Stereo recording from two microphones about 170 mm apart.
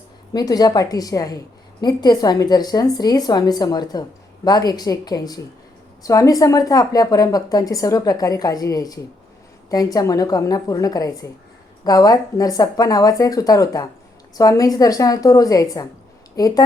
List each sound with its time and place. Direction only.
0.3 s a woman's voice: 20° left (ahead or behind)